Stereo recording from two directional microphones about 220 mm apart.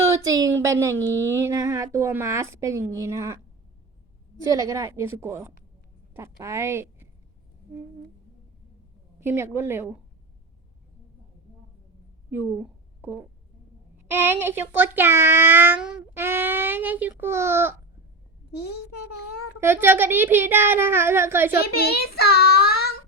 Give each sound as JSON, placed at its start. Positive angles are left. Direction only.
{"t": 0.0, "sound": "a woman's voice", "side_deg": -15}
{"t": 4.4, "sound": "a child's voice", "side_deg": -15}
{"t": 9.2, "sound": "a child's voice", "side_deg": -10}
{"t": 12.3, "sound": "a woman's voice", "side_deg": -5}
{"t": 19.5, "sound": "a child's voice", "side_deg": -10}
{"t": 21.5, "sound": "a child's voice", "side_deg": 45}